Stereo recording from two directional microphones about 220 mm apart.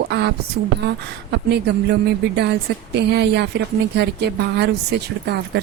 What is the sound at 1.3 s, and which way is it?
Speech, 50° right (ahead or behind).